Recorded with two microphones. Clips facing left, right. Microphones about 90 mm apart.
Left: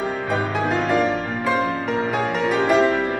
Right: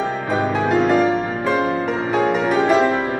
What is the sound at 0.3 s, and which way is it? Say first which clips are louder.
Music: right 4 dB; 5° right (ahead or behind).